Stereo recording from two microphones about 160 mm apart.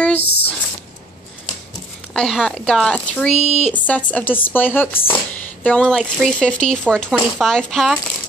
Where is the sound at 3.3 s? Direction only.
40° left (ahead or behind).